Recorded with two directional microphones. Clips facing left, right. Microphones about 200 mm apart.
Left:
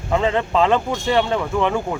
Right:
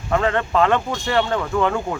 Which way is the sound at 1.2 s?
5° left (ahead or behind).